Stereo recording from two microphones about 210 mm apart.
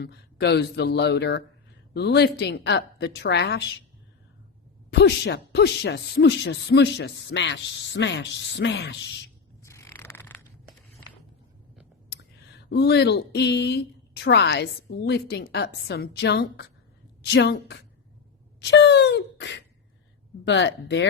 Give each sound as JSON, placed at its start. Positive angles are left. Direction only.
{"t": 0.0, "sound": "a woman's voice", "side_deg": 55}
{"t": 4.9, "sound": "a man's voice", "side_deg": 55}
{"t": 9.6, "sound": "a sound", "side_deg": 15}
{"t": 12.1, "sound": "a woman's voice", "side_deg": 55}
{"t": 18.6, "sound": "a sound", "side_deg": 55}
{"t": 20.4, "sound": "a man's voice", "side_deg": 60}